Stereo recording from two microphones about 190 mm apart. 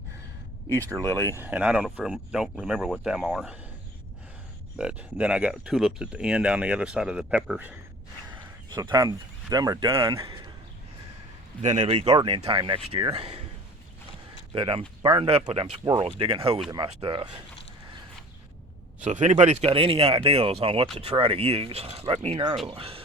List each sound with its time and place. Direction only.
0.7 s speech: 15° right (ahead or behind)
0.9 s speech: 15° left (ahead or behind)
1.4 s speech: 5° right (ahead or behind)
4.8 s speech: 5° right (ahead or behind)
8.3 s speech: 25° right (ahead or behind)
11.6 s speech: 35° right (ahead or behind)
14.5 s speech: 25° right (ahead or behind)
19.0 s speech: 40° right (ahead or behind)